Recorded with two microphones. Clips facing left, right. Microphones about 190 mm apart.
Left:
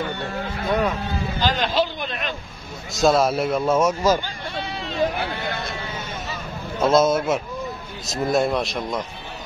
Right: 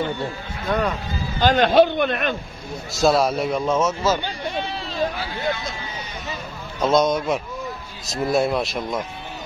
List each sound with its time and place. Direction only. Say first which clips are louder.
0.7 s speech: even; 5° left (ahead or behind)
1.0 s speech: left 2 dB; 65° left (ahead or behind)
1.4 s a man's voice: right 8 dB; 55° right (ahead or behind)
3.0 s a man's voice: even; centre (ahead or behind)
5.1 s speech: right 1 dB; 60° left (ahead or behind)
6.8 s a man's voice: left 1 dB; 5° left (ahead or behind)